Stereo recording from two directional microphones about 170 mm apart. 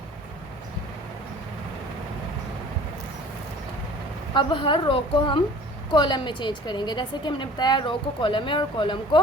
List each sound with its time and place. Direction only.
4.4 s a woman's voice: 30° left (ahead or behind)